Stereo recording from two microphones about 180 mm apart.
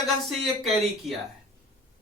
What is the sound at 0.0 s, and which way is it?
A man's voice, centre (ahead or behind).